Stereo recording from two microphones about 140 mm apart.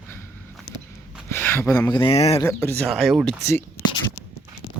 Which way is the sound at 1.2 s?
15° left (ahead or behind).